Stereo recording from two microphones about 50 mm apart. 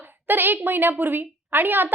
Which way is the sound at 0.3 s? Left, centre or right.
Right.